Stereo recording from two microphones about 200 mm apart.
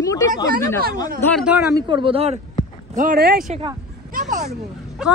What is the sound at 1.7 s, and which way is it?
Speech, 25° right (ahead or behind).